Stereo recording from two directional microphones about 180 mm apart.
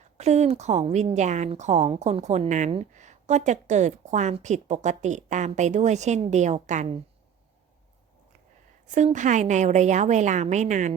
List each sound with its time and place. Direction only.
0.0 s speech: 40° right (ahead or behind)
8.9 s speech: 40° right (ahead or behind)